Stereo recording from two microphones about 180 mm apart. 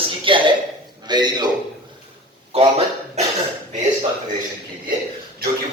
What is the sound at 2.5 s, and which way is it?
Speech, 35° right (ahead or behind).